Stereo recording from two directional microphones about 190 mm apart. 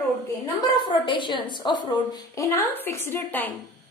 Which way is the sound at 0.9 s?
25° left (ahead or behind).